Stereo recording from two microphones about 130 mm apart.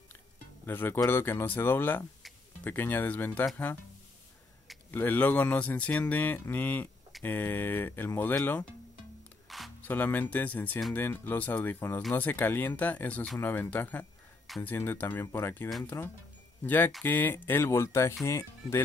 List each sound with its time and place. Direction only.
0.7 s speech: 15° left (ahead or behind)
4.9 s speech: 15° left (ahead or behind)
9.5 s music: centre (ahead or behind)
9.8 s speech: 15° left (ahead or behind)